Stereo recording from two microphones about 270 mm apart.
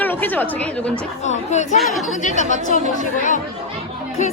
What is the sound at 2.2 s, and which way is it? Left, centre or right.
Music, left.